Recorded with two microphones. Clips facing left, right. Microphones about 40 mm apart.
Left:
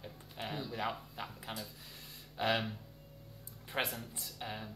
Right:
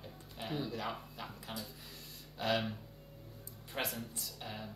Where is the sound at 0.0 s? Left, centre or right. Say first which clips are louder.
Left 2 dB; centre.